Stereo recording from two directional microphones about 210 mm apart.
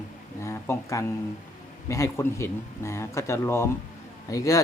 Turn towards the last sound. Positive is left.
turn(degrees=15)  # may be behind; listen again after turning